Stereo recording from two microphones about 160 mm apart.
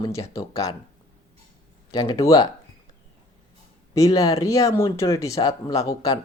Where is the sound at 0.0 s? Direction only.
20° left (ahead or behind).